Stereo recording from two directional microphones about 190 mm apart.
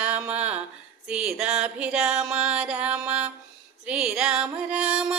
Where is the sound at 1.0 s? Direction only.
5° right (ahead or behind).